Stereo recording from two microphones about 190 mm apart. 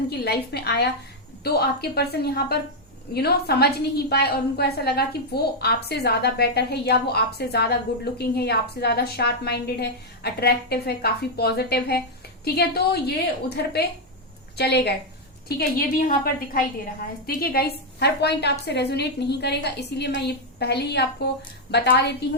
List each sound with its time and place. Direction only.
0.1 s a woman's voice: 55° left (ahead or behind)